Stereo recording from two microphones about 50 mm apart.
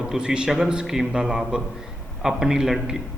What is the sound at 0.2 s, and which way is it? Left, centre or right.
A man's voice, centre.